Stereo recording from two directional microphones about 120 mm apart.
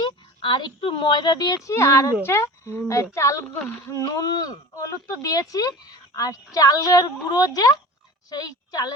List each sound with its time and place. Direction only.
0.0 s a woman's voice: 40° left (ahead or behind)